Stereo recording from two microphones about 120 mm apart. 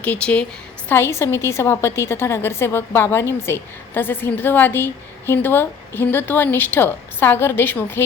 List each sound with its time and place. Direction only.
0.0 s a woman's voice: 10° left (ahead or behind)